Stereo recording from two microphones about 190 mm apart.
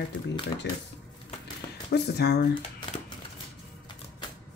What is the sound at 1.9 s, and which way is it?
Speech, 60° left (ahead or behind).